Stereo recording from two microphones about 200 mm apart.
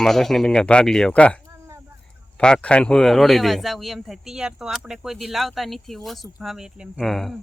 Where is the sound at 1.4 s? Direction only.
15° right (ahead or behind).